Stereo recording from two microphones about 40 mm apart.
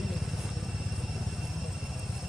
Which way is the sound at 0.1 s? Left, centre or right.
Centre.